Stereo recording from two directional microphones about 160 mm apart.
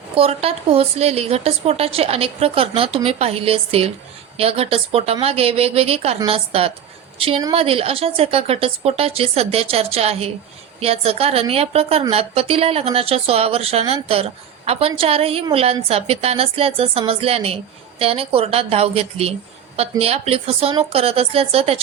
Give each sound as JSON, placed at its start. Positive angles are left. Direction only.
{"t": 0.2, "sound": "speech", "side_deg": -35}